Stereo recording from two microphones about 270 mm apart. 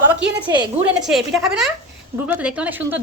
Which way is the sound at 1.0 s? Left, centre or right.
Centre.